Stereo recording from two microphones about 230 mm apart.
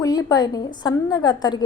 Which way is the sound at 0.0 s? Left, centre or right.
Centre.